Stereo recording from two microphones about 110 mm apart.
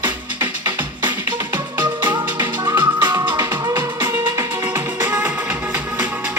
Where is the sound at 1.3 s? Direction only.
40° right (ahead or behind).